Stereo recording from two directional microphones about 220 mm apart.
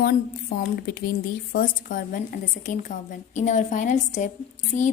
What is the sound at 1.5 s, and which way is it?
A woman's voice, 40° left (ahead or behind).